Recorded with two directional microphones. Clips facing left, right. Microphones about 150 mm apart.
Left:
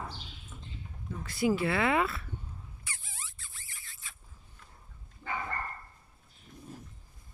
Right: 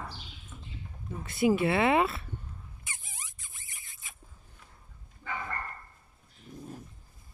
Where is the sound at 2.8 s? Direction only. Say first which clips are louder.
Even; 20° right (ahead or behind).